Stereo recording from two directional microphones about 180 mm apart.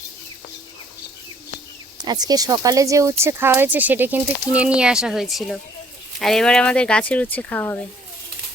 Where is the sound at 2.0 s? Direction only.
20° right (ahead or behind); by 7.8 s 10° left (ahead or behind).